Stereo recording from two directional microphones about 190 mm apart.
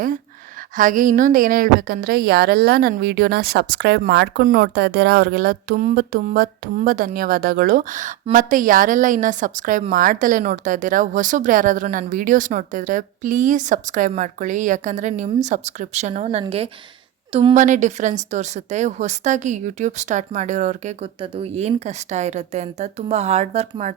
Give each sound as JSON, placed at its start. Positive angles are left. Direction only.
{"t": 0.8, "sound": "a woman's voice", "side_deg": -45}